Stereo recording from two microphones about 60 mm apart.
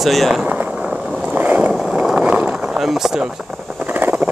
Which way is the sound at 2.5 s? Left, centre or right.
Centre.